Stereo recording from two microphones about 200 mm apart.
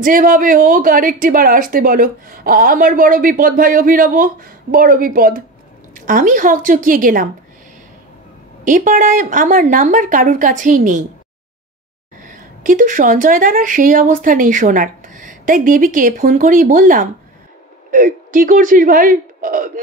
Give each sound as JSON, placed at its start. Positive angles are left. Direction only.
{"t": 0.0, "sound": "a woman's voice", "side_deg": -40}
{"t": 8.6, "sound": "speech", "side_deg": -40}
{"t": 12.3, "sound": "speech", "side_deg": -40}